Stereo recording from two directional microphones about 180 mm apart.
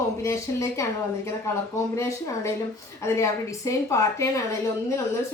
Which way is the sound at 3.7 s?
15° left (ahead or behind).